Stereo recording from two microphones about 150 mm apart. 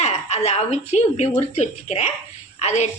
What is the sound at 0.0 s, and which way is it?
Speech, 45° left (ahead or behind).